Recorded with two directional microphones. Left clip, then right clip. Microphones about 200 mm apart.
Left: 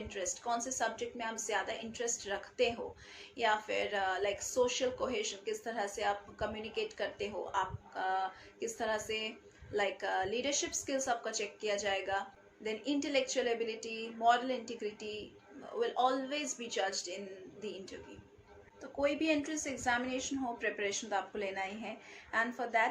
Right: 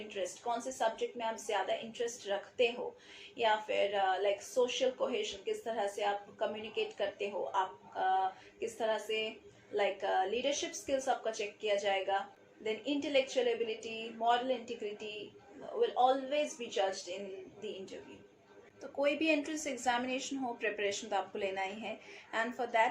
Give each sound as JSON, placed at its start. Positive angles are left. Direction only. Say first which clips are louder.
{"t": 0.1, "sound": "speech", "louder": "even", "side_deg": 15}
{"t": 18.8, "sound": "a woman's voice", "louder": "right 1 dB", "side_deg": 10}